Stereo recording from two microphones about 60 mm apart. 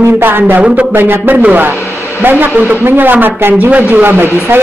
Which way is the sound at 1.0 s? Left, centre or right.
Right.